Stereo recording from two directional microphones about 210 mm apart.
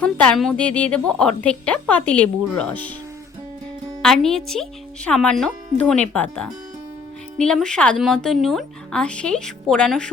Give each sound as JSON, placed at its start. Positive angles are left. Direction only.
{"t": 0.0, "sound": "a woman's voice", "side_deg": 5}
{"t": 4.0, "sound": "a woman's voice", "side_deg": 0}
{"t": 7.3, "sound": "a woman's voice", "side_deg": 5}